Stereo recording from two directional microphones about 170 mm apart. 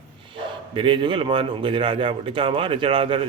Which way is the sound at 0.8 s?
30° right (ahead or behind).